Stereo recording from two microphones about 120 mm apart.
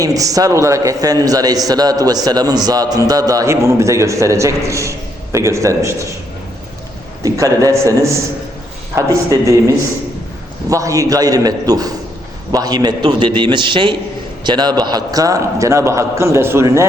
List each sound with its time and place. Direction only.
0.0 s a man's voice: 30° right (ahead or behind)
7.2 s a man's voice: 25° right (ahead or behind)